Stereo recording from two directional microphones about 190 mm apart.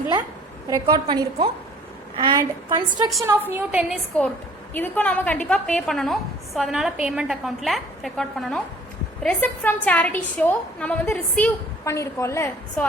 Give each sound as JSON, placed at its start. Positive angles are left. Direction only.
{"t": 0.7, "sound": "a woman's voice", "side_deg": -20}
{"t": 3.2, "sound": "a woman's voice", "side_deg": -10}
{"t": 4.7, "sound": "a woman's voice", "side_deg": 10}